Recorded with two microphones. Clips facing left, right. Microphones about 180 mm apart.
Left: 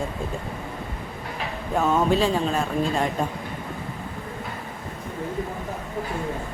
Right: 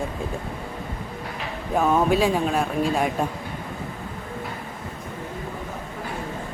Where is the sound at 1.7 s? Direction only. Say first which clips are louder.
Right 1 dB; 10° right (ahead or behind).